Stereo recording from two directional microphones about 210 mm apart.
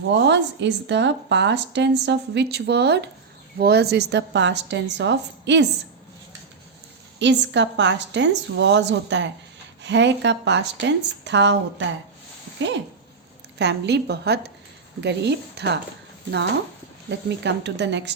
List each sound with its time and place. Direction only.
0.1 s speech: 55° right (ahead or behind)
7.2 s a woman's voice: 55° right (ahead or behind)
17.1 s speech: 55° right (ahead or behind)